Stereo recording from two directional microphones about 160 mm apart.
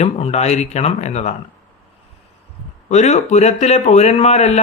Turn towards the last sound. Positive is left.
turn(degrees=45)  # may be behind; listen again after turning